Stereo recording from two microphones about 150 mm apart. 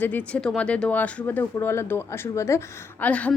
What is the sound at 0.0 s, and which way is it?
A woman's voice, 10° left (ahead or behind).